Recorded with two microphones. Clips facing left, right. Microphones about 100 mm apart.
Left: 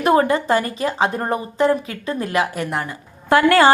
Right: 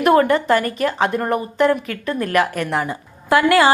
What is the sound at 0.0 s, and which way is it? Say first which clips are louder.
Speech: right 2 dB; 25° left (ahead or behind).